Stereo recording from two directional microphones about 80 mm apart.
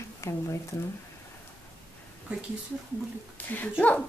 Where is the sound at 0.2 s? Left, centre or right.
Left.